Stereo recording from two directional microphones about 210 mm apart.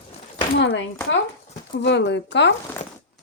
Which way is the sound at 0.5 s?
60° left (ahead or behind).